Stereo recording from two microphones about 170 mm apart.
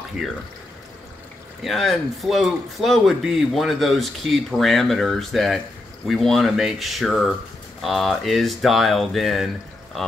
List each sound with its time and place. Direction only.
1.6 s speech: centre (ahead or behind)